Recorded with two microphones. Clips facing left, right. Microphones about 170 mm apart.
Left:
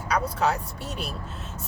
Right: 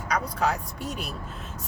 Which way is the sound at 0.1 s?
30° left (ahead or behind).